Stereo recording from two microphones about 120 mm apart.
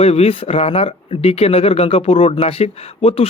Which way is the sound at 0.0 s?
60° left (ahead or behind).